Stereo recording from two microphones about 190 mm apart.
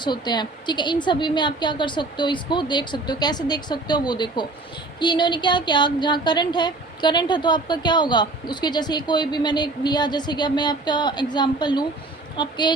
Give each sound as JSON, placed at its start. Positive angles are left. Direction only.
{"t": 0.0, "sound": "a woman's voice", "side_deg": 25}